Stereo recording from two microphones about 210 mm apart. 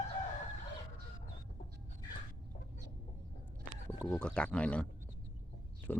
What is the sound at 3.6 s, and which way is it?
Speech, 5° left (ahead or behind).